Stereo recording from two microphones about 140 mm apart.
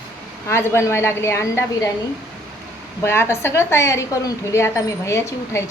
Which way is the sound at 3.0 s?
15° left (ahead or behind).